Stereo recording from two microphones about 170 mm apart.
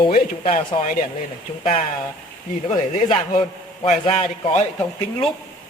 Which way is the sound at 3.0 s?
45° left (ahead or behind).